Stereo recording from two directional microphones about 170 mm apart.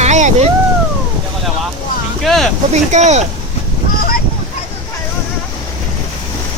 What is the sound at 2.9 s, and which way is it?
Speech, 40° right (ahead or behind).